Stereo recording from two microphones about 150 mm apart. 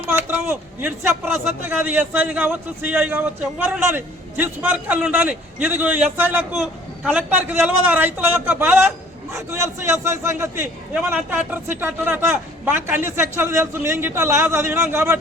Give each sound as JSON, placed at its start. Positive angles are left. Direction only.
{"t": 0.1, "sound": "a man's voice", "side_deg": -15}